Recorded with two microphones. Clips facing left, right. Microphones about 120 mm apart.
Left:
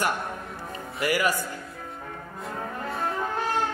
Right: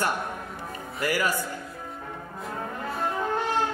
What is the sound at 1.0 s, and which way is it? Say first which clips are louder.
Speech: left 2 dB; 15° left (ahead or behind).